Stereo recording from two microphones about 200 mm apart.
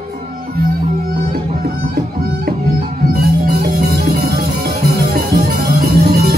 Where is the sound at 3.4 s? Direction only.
55° right (ahead or behind).